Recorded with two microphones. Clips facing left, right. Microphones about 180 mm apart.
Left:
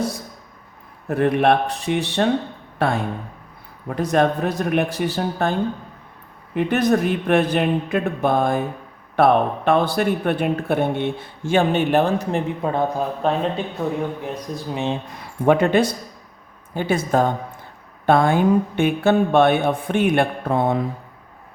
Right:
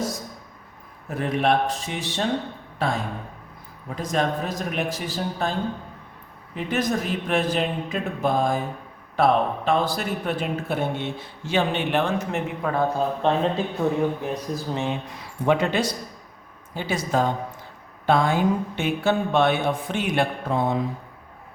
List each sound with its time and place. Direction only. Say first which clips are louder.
1.0 s speech: left 6 dB; 60° left (ahead or behind); by 12.7 s 35° left (ahead or behind)
12.7 s speech: even; 15° left (ahead or behind)
13.2 s speech: left 1 dB; centre (ahead or behind)
14.7 s speech: left 3 dB; 20° left (ahead or behind)
15.4 s speech: left 5 dB; 55° left (ahead or behind)